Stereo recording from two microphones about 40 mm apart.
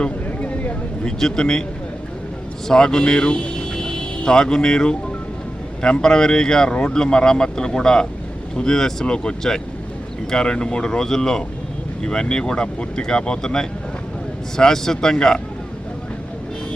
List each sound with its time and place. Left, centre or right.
0.3 s a sound: left
1.0 s speech: centre
2.6 s speech: centre